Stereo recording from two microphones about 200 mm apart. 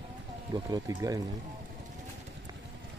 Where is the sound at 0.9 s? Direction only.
20° right (ahead or behind).